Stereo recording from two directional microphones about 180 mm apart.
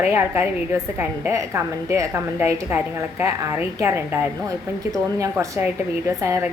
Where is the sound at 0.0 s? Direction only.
15° right (ahead or behind).